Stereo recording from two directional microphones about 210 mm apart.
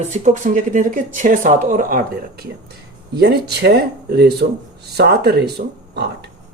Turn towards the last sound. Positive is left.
turn(degrees=-50)  # may be behind; listen again after turning